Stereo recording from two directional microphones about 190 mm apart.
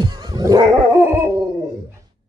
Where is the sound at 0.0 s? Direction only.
20° right (ahead or behind).